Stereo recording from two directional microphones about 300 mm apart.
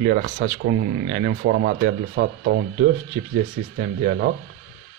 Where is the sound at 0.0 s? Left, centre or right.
Right.